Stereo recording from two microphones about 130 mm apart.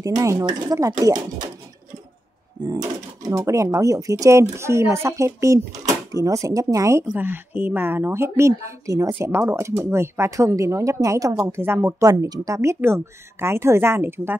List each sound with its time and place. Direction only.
0.0 s a woman's voice: 25° right (ahead or behind)
2.6 s a woman's voice: 30° right (ahead or behind)